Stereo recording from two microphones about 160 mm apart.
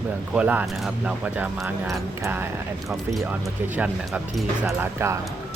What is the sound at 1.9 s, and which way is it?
Speech, 15° right (ahead or behind).